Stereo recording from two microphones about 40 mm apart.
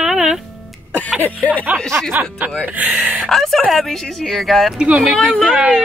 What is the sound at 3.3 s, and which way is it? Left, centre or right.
Speech, centre.